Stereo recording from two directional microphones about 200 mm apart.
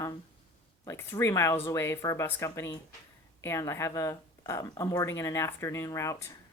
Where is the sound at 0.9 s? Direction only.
15° left (ahead or behind).